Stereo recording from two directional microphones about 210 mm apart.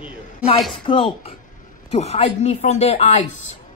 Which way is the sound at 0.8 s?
25° left (ahead or behind).